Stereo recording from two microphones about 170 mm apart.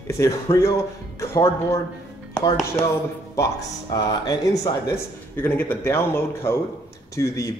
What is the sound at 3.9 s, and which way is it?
Speech, 20° left (ahead or behind).